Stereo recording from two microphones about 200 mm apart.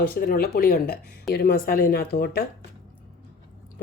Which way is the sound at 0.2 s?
45° left (ahead or behind).